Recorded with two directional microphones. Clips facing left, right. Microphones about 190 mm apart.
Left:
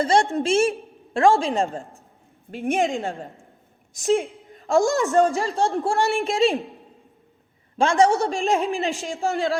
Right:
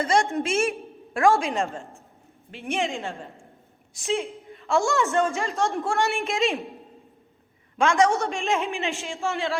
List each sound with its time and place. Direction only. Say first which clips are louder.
0.0 s a woman's voice: left 3 dB; 35° left (ahead or behind)
2.5 s a woman's voice: left 5 dB; 45° left (ahead or behind)
7.8 s a woman's voice: left 3 dB; 35° left (ahead or behind)